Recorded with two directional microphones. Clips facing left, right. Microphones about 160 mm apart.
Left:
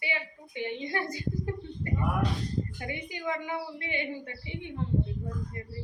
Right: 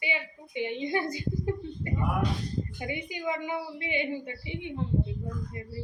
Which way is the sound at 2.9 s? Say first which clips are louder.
Right 5 dB; 15° right (ahead or behind).